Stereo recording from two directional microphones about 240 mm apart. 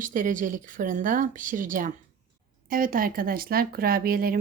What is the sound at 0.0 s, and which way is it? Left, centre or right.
Speech, right.